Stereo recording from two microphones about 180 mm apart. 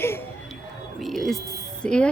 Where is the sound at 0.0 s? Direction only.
15° left (ahead or behind).